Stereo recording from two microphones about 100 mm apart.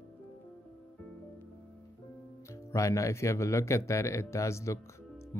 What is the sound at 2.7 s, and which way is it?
Speech, 30° left (ahead or behind).